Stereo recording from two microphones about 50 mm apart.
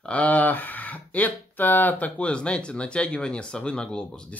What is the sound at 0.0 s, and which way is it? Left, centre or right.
Speech, left.